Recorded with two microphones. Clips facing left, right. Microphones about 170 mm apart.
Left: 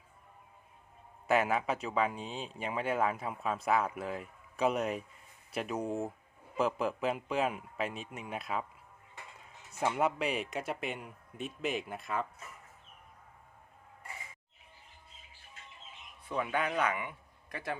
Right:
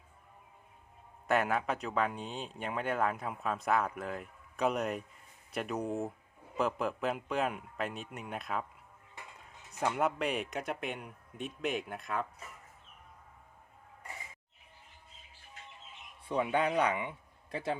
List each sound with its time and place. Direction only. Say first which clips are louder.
1.3 s speech: left 1 dB; centre (ahead or behind)
9.8 s speech: left 1 dB; centre (ahead or behind)
16.2 s a man's voice: right 3 dB; 25° right (ahead or behind)